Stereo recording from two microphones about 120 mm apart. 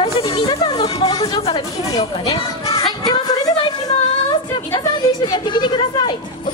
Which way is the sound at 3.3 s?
35° left (ahead or behind).